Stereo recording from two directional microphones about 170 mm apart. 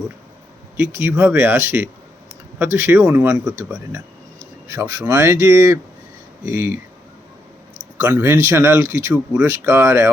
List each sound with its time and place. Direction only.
0.8 s speech: 15° right (ahead or behind)
4.7 s speech: 15° right (ahead or behind)
8.0 s speech: 10° right (ahead or behind)